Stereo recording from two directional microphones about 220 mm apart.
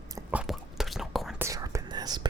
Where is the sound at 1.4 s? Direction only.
15° right (ahead or behind).